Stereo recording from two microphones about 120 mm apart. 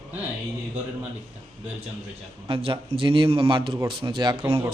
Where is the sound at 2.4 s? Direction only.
50° right (ahead or behind).